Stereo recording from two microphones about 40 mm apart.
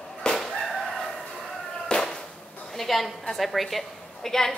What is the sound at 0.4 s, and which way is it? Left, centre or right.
Chicken, centre.